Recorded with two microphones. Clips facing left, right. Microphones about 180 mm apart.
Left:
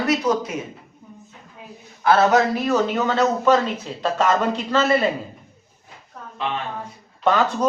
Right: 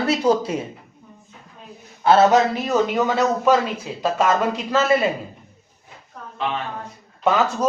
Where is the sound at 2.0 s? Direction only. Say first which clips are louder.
Right 2 dB; 25° right (ahead or behind).